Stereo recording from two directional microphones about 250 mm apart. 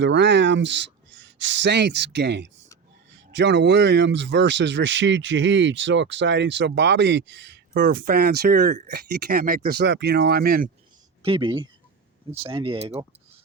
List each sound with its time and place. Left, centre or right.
0.0 s speech: right
11.2 s speech: right